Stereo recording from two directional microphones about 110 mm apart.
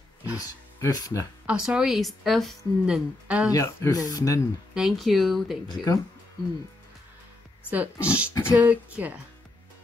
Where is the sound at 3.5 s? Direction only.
30° left (ahead or behind).